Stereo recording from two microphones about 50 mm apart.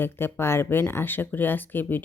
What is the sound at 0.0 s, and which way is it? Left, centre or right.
Speech, left.